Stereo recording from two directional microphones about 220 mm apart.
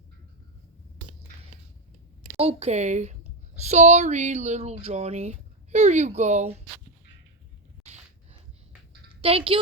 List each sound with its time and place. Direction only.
2.4 s a woman's voice: 25° right (ahead or behind)
9.2 s a woman's voice: 25° right (ahead or behind)